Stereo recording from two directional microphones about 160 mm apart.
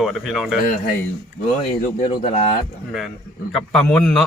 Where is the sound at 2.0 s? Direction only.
50° left (ahead or behind).